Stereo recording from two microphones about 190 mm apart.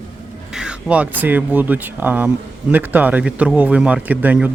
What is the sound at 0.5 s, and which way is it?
Speech, 5° right (ahead or behind).